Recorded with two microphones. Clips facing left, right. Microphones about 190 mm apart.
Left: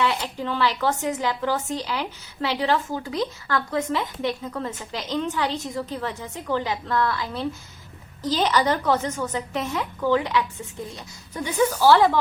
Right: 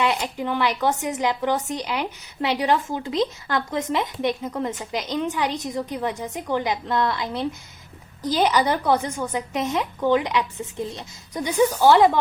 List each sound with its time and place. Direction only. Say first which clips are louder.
0.0 s speech: right 1 dB; 15° right (ahead or behind)